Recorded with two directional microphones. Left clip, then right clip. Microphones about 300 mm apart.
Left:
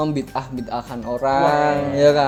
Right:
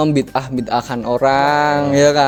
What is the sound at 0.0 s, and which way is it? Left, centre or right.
A man's voice, right.